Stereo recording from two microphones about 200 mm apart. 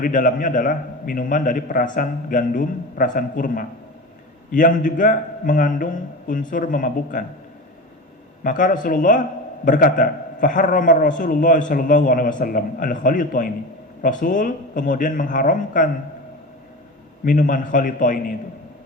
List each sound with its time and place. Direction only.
0.0 s a man's voice: 40° left (ahead or behind)
8.4 s a man's voice: 40° left (ahead or behind)
17.2 s a man's voice: 40° left (ahead or behind)